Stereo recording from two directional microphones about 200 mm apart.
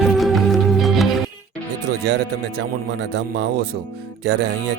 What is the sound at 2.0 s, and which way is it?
Speech, 55° right (ahead or behind).